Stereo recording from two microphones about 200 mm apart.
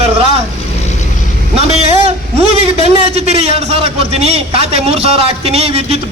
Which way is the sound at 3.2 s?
30° right (ahead or behind).